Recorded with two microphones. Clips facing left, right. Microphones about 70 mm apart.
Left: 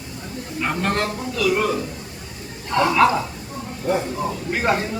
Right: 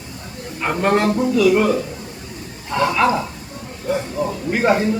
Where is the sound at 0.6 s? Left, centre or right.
Centre.